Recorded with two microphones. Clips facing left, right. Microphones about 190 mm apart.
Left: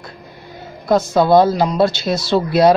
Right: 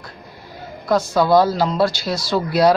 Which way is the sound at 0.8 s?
20° left (ahead or behind).